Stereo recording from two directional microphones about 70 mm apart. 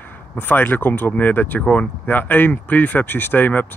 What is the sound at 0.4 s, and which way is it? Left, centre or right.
Speech, left.